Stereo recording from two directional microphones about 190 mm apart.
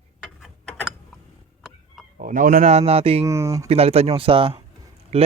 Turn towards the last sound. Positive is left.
turn(degrees=-30)  # may be behind; listen again after turning